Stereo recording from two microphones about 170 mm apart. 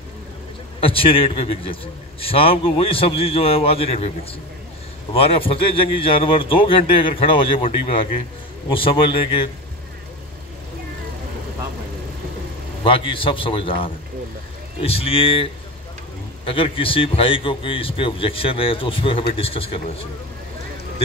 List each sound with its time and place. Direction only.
0.7 s a man's voice: 30° left (ahead or behind)
12.8 s a man's voice: 30° left (ahead or behind)
14.8 s a man's voice: 35° left (ahead or behind)
16.4 s a man's voice: 30° left (ahead or behind)